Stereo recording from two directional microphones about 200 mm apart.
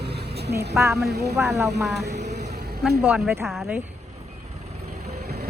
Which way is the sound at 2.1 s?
35° right (ahead or behind).